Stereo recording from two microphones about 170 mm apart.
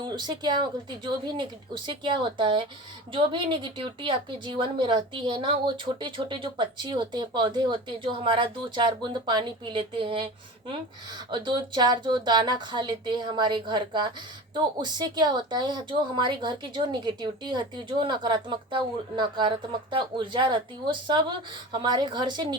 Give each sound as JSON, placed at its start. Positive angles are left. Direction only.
{"t": 0.0, "sound": "a woman's voice", "side_deg": -25}
{"t": 11.3, "sound": "a woman's voice", "side_deg": -25}